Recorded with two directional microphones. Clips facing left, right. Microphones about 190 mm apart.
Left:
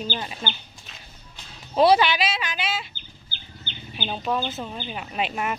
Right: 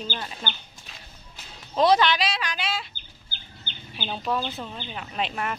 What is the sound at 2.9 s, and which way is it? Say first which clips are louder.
Chicken: left 2 dB; 45° right (ahead or behind).